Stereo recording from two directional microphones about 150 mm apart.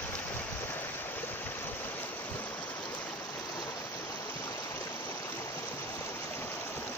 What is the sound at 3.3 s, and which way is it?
Stream, 25° left (ahead or behind).